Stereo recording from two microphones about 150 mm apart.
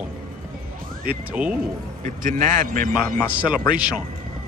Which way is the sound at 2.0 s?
60° right (ahead or behind).